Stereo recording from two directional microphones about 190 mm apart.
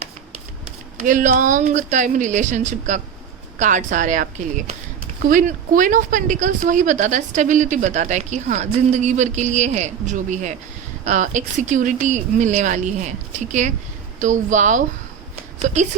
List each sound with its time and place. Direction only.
1.0 s speech: 45° right (ahead or behind)